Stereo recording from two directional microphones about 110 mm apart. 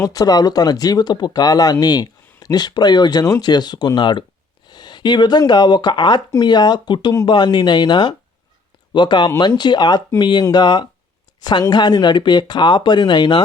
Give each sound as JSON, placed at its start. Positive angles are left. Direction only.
{"t": 0.0, "sound": "speech", "side_deg": 35}